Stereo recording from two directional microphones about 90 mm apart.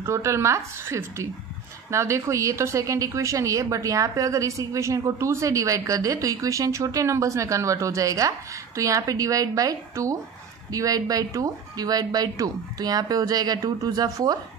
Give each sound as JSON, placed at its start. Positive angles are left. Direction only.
{"t": 0.0, "sound": "a woman's voice", "side_deg": -30}